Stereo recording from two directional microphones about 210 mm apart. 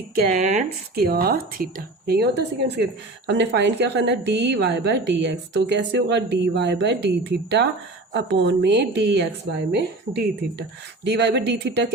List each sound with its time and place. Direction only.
0.2 s speech: 35° right (ahead or behind)
0.9 s a woman's voice: 45° right (ahead or behind)